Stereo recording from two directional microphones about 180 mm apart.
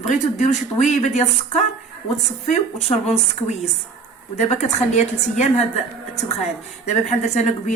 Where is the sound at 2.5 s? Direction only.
40° left (ahead or behind).